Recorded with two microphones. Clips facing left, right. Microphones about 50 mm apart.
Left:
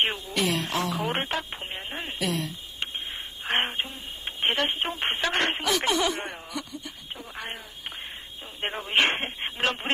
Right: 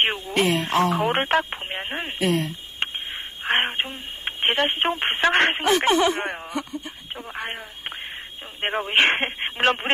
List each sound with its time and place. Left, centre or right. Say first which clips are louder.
0.0 s speech: right 5 dB; right